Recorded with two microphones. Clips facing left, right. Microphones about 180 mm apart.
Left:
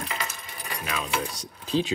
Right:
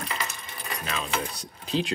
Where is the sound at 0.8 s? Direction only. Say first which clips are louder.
Left 1 dB; 10° left (ahead or behind).